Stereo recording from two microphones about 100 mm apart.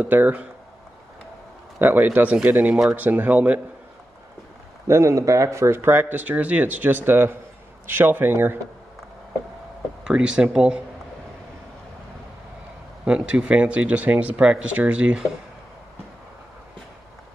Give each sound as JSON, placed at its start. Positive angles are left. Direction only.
{"t": 0.0, "sound": "speech", "side_deg": -20}
{"t": 1.8, "sound": "speech", "side_deg": -20}
{"t": 4.8, "sound": "speech", "side_deg": -30}
{"t": 10.0, "sound": "speech", "side_deg": -10}
{"t": 13.0, "sound": "speech", "side_deg": -10}